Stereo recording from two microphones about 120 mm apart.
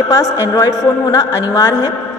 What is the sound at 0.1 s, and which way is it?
A woman's voice, 30° left (ahead or behind).